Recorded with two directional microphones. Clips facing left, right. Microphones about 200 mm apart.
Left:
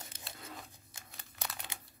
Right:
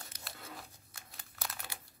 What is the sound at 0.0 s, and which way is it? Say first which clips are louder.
Tearing: left 1 dB; 25° left (ahead or behind).